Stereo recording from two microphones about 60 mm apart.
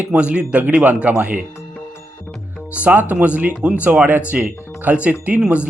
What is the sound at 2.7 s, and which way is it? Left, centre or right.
Speech, right.